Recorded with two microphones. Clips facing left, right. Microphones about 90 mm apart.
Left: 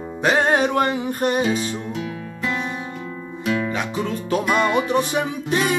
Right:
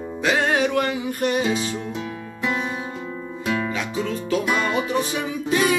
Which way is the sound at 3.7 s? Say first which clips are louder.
Left 1 dB; 45° left (ahead or behind).